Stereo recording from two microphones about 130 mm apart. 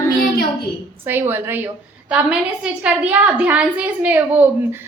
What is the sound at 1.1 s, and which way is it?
Speech, 15° right (ahead or behind).